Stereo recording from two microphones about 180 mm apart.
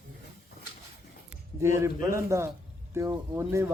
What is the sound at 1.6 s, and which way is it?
Speech, 15° right (ahead or behind).